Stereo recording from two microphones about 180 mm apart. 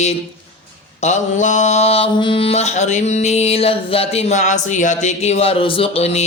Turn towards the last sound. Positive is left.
turn(degrees=35)  # may be behind; listen again after turning